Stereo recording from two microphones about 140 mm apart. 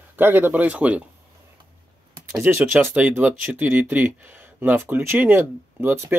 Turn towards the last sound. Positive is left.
turn(degrees=-15)  # may be behind; listen again after turning